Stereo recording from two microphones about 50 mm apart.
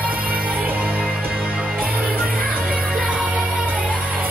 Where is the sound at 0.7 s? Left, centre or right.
Right.